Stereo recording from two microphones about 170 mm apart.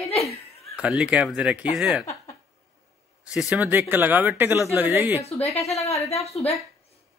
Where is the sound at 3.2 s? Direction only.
5° right (ahead or behind).